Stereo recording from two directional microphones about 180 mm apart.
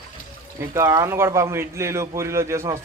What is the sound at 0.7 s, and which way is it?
A man's voice, 15° right (ahead or behind).